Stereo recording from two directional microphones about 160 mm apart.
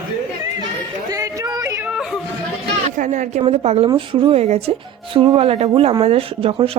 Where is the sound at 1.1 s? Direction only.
20° right (ahead or behind).